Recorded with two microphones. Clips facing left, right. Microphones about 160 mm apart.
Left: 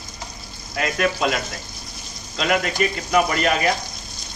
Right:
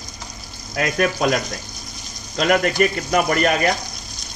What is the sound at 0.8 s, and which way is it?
Speech, 45° right (ahead or behind).